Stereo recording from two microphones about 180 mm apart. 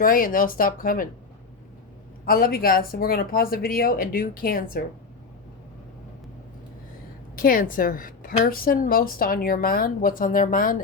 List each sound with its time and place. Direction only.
0.0 s a woman's voice: 50° left (ahead or behind)
2.2 s speech: 55° left (ahead or behind)
7.3 s a woman's voice: 50° left (ahead or behind)